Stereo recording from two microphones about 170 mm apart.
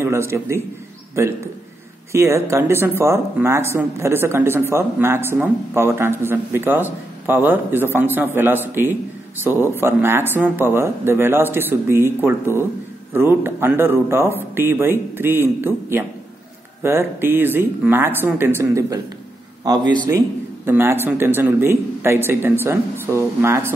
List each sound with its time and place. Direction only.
0.0 s speech: 15° right (ahead or behind)
2.1 s speech: 15° right (ahead or behind)